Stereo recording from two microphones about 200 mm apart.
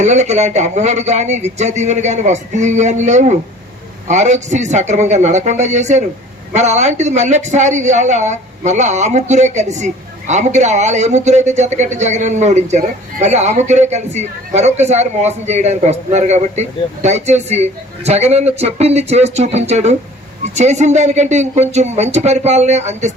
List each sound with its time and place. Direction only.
0.0 s a man's voice: 35° right (ahead or behind)